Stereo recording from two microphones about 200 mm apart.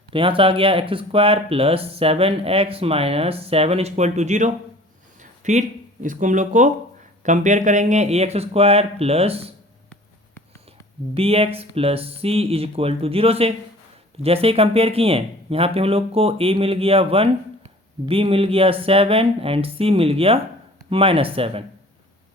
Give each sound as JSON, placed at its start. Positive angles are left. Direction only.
{"t": 0.1, "sound": "speech", "side_deg": -25}
{"t": 11.1, "sound": "speech", "side_deg": -30}